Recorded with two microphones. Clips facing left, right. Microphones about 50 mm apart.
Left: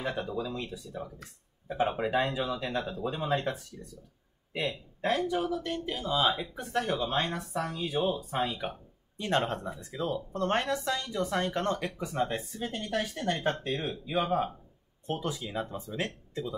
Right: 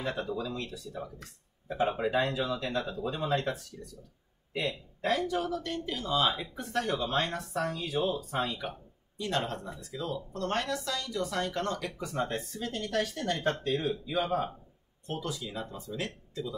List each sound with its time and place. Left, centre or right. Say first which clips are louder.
0.0 s speech: even; centre
5.3 s speech: left 1 dB; centre
12.1 s speech: left 1 dB; centre; by 16.1 s left